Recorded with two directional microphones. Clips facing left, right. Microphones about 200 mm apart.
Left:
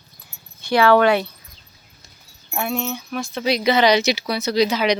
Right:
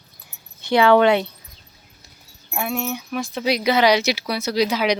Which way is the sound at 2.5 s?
5° right (ahead or behind).